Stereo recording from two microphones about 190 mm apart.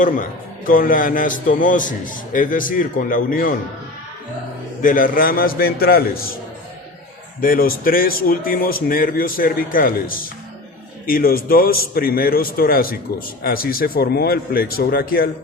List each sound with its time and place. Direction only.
0.0 s a man's voice: 45° left (ahead or behind)
4.8 s a man's voice: 45° left (ahead or behind)
7.4 s a man's voice: 50° left (ahead or behind)